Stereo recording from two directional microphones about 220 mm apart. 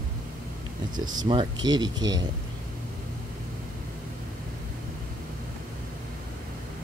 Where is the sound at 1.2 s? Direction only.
20° right (ahead or behind).